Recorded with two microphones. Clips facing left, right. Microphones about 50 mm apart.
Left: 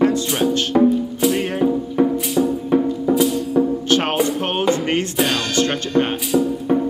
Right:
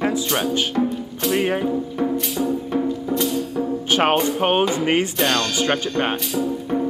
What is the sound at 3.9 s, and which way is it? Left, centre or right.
Music, centre.